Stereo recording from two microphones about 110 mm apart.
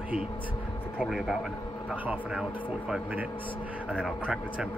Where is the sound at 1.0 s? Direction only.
Centre (ahead or behind).